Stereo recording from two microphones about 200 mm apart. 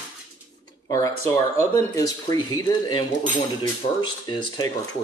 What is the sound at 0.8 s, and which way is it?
Speech, 15° left (ahead or behind).